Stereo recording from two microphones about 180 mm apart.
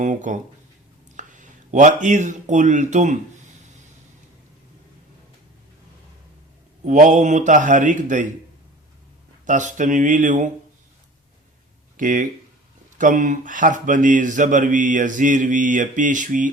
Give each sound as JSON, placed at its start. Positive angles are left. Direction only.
{"t": 0.0, "sound": "speech", "side_deg": -45}
{"t": 6.8, "sound": "speech", "side_deg": -45}
{"t": 9.5, "sound": "speech", "side_deg": -45}
{"t": 11.9, "sound": "speech", "side_deg": -45}